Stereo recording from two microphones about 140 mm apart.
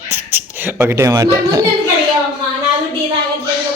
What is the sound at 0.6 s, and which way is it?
A man's voice, 15° right (ahead or behind).